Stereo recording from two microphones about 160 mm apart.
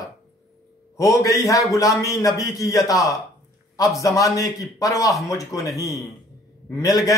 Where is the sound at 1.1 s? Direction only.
20° left (ahead or behind).